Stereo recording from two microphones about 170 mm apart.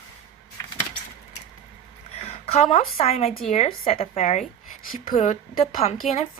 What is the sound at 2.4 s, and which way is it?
A woman's voice, 40° left (ahead or behind).